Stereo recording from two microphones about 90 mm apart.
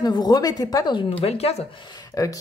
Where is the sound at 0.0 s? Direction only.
50° left (ahead or behind).